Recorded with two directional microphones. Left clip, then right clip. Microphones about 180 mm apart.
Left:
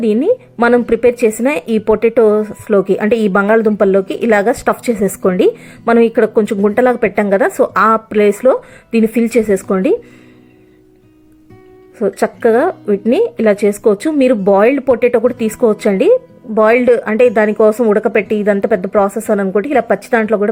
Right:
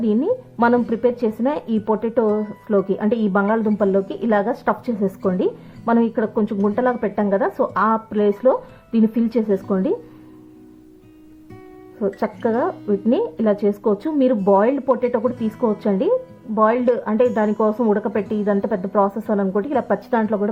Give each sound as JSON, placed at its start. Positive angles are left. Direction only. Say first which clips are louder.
{"t": 0.0, "sound": "a woman's voice", "louder": "left 7 dB", "side_deg": 20}
{"t": 11.9, "sound": "a woman's voice", "louder": "left 8 dB", "side_deg": 30}